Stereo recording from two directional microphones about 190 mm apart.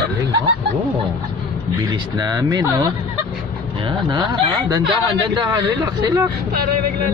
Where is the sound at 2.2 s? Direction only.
20° right (ahead or behind).